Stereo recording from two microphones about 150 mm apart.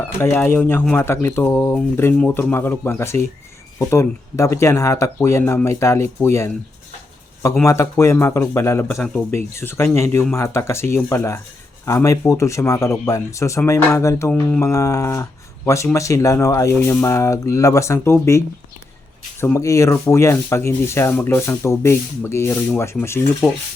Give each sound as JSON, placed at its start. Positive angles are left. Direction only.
{"t": 0.0, "sound": "speech", "side_deg": 15}
{"t": 7.6, "sound": "speech", "side_deg": 20}